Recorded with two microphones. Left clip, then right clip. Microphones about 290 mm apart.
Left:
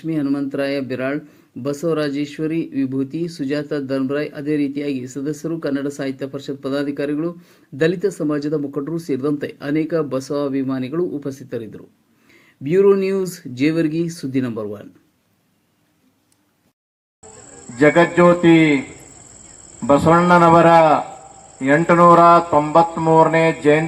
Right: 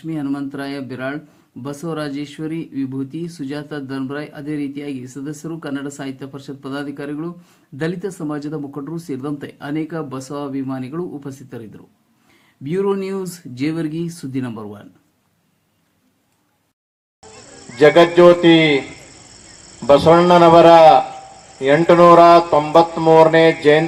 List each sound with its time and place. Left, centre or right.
0.0 s speech: centre
17.7 s mantra: right
19.9 s mantra: right